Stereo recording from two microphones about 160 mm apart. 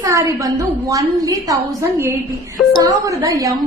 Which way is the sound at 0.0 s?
20° right (ahead or behind).